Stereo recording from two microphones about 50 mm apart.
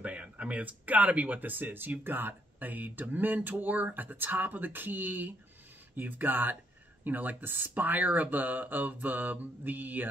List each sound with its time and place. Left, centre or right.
0.0 s speech: right